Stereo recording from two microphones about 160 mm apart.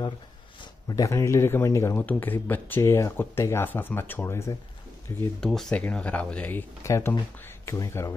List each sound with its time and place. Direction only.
0.6 s speech: 25° left (ahead or behind)
5.4 s speech: 5° left (ahead or behind)